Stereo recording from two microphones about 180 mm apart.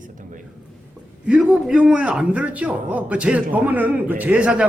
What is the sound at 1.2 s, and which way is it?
A man's voice, 5° right (ahead or behind).